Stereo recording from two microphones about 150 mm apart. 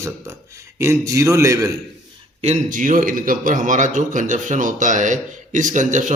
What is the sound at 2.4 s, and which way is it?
A man's voice, 55° right (ahead or behind).